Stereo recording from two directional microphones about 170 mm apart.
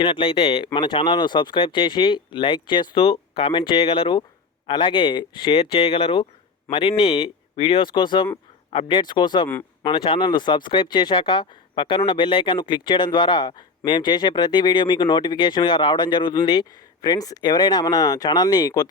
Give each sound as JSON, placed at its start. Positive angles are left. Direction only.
{"t": 0.0, "sound": "speech", "side_deg": 30}